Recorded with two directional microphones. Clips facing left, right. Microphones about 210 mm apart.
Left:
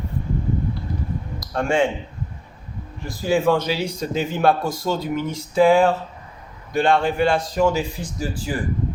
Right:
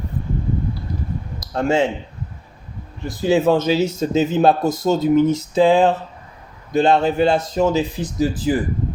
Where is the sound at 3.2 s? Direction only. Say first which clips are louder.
Right 3 dB; 20° right (ahead or behind).